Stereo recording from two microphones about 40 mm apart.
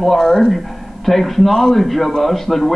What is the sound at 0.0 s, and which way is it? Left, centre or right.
A man's voice, centre.